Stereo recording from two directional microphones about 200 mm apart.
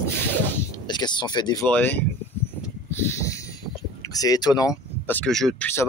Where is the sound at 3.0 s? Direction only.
15° left (ahead or behind).